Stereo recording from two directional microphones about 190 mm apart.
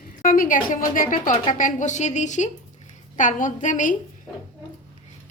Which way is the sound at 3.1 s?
45° left (ahead or behind).